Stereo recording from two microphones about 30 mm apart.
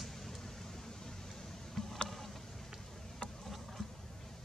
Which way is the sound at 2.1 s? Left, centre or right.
Centre.